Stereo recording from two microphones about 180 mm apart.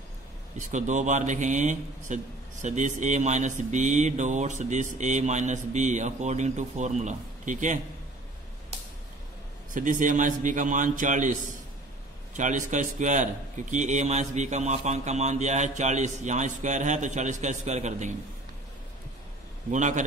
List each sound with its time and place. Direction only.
0.6 s a man's voice: 45° right (ahead or behind)
9.8 s a man's voice: 45° right (ahead or behind)
12.4 s a man's voice: 45° right (ahead or behind)
19.7 s a man's voice: 40° right (ahead or behind)